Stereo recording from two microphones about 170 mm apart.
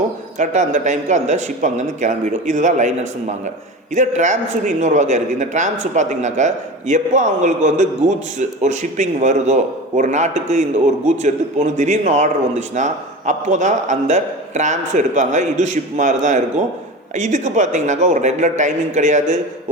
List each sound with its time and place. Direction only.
0.3 s a man's voice: 45° right (ahead or behind)
3.9 s a man's voice: 45° right (ahead or behind)